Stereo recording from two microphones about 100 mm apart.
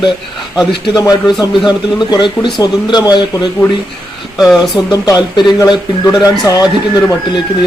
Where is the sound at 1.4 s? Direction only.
45° left (ahead or behind).